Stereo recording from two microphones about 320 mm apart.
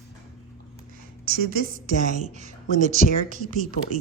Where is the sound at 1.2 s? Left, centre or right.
Right.